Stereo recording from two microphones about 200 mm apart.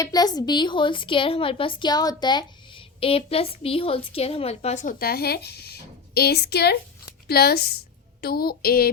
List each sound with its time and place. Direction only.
0.0 s a woman's voice: 20° left (ahead or behind); by 8.9 s 50° left (ahead or behind)